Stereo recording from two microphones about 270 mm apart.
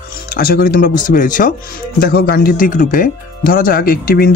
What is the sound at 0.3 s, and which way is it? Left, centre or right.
Speech, left.